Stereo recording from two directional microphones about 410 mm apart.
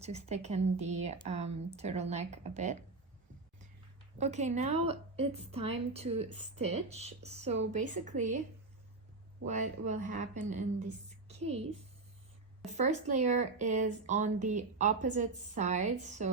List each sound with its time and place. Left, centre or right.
0.0 s speech: centre
4.2 s speech: centre
9.5 s speech: centre
11.3 s a sound: centre
12.6 s speech: centre